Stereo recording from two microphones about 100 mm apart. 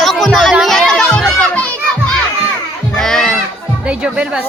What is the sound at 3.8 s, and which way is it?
Speech, 10° right (ahead or behind).